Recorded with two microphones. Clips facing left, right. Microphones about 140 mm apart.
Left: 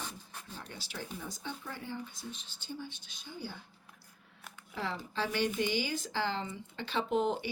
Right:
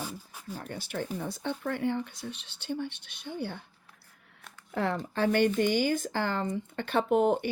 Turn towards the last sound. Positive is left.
turn(degrees=-55)  # may be behind; listen again after turning